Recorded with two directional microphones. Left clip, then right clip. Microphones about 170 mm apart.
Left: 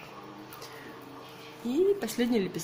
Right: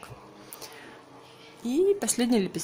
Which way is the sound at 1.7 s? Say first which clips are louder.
Right 2 dB; 45° right (ahead or behind).